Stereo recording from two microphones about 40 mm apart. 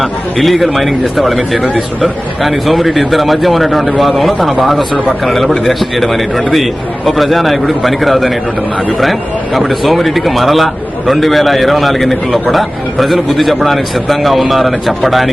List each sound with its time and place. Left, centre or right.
0.0 s speech: centre
2.4 s speech: centre